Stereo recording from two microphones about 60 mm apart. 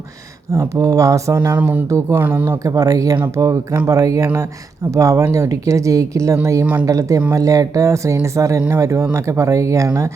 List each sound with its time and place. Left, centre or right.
0.5 s speech: right
1.5 s speech: right
1.9 s speech: right
2.1 s speech: right
2.6 s speech: right
3.3 s speech: right
4.9 s speech: right
6.8 s speech: right